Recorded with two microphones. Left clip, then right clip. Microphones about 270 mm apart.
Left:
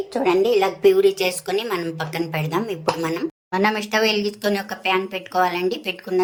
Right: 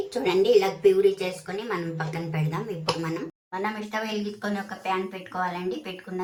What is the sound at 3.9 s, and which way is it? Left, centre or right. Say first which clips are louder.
Speech: left 11 dB; left.